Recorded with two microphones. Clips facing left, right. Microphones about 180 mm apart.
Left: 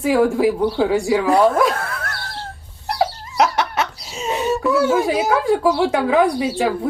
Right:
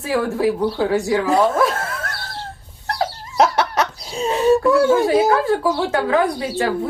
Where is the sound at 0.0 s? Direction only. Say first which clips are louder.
Left 4 dB; 15° left (ahead or behind).